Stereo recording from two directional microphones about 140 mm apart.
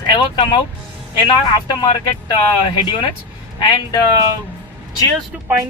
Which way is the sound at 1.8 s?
35° left (ahead or behind).